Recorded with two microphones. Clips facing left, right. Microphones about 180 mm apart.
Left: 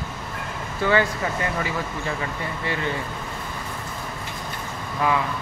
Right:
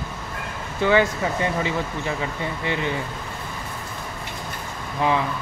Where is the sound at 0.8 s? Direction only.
20° right (ahead or behind).